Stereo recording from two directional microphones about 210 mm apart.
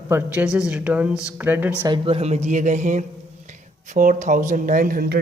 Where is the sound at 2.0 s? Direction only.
30° right (ahead or behind).